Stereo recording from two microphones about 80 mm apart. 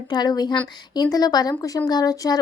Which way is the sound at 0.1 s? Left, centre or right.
Left.